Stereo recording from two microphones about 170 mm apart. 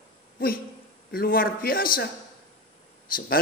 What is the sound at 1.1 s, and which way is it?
Speech, 60° left (ahead or behind).